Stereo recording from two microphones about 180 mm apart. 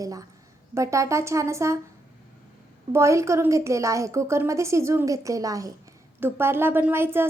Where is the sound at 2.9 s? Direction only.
15° right (ahead or behind).